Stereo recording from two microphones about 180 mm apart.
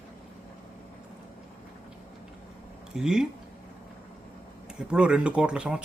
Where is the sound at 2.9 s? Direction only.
5° right (ahead or behind).